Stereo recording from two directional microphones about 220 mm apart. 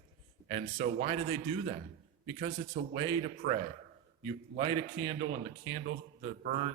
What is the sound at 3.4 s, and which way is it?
Speech, 35° right (ahead or behind).